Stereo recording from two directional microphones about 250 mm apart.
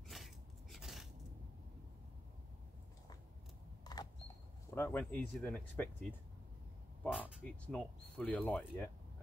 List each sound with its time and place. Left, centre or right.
0.1 s a sound: centre
3.8 s camera: centre
4.7 s speech: centre
7.0 s speech: centre